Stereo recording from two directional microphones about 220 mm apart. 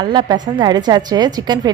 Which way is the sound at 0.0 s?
20° right (ahead or behind).